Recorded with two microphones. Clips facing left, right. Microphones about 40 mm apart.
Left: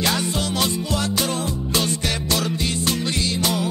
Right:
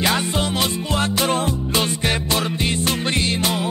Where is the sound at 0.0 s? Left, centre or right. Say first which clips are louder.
Right 2 dB; right.